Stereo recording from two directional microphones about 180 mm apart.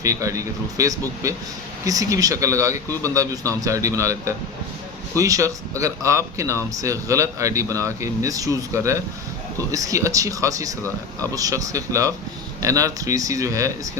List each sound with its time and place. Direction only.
0.0 s a man's voice: 15° right (ahead or behind)